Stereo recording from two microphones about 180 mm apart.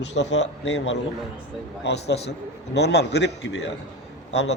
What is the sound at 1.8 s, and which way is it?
A man's voice, 70° left (ahead or behind).